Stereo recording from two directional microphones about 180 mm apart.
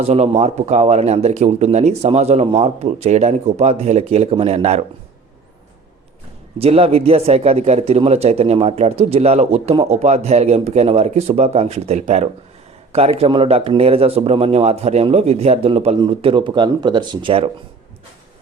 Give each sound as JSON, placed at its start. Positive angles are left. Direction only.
{"t": 0.0, "sound": "a man's voice", "side_deg": -35}
{"t": 6.6, "sound": "a man's voice", "side_deg": -35}